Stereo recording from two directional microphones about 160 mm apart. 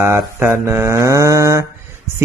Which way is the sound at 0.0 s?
15° right (ahead or behind).